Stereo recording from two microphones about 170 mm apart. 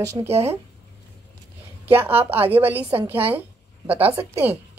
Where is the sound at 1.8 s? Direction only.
10° right (ahead or behind).